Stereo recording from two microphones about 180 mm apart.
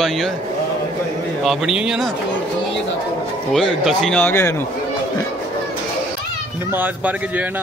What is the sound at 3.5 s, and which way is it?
A man's voice, centre (ahead or behind).